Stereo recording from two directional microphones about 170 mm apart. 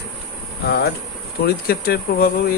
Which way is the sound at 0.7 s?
70° left (ahead or behind).